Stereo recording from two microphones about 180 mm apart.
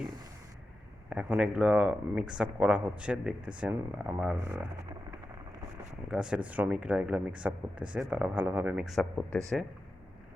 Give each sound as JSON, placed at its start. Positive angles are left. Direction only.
{"t": 1.1, "sound": "speech", "side_deg": -5}
{"t": 6.1, "sound": "speech", "side_deg": -5}